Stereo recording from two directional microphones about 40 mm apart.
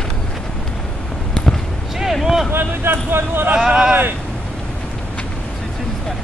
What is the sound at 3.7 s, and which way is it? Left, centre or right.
Speech, right.